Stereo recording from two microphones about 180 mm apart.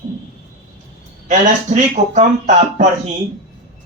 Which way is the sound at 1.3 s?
40° right (ahead or behind).